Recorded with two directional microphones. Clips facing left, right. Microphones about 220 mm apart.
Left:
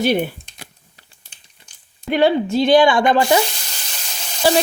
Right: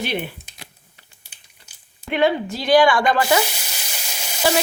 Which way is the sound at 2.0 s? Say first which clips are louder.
Left 4 dB; 35° left (ahead or behind).